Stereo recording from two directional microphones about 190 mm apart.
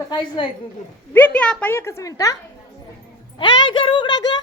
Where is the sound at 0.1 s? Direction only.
25° left (ahead or behind).